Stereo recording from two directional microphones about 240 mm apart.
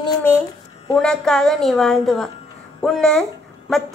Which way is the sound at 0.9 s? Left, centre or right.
Centre.